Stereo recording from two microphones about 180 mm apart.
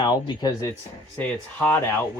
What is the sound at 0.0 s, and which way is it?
Speech, 20° left (ahead or behind).